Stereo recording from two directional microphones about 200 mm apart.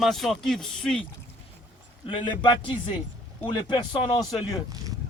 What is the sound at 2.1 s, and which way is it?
Speech, 25° left (ahead or behind).